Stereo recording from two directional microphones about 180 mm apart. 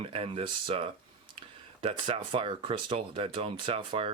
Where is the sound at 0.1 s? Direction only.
30° right (ahead or behind).